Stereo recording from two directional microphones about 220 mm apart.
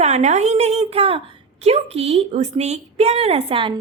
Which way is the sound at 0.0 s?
30° right (ahead or behind).